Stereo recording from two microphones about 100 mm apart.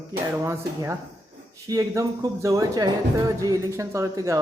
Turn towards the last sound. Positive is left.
turn(degrees=-30)  # may be behind; listen again after turning